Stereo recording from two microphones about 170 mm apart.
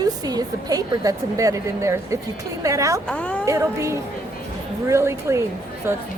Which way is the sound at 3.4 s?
20° right (ahead or behind).